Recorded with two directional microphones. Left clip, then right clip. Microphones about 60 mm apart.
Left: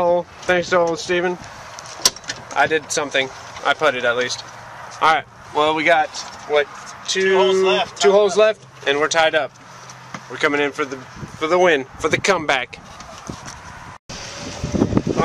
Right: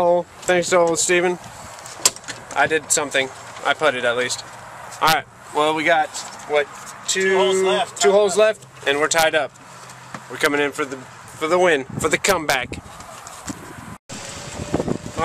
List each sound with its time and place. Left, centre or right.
0.0 s speech: right
2.5 s speech: centre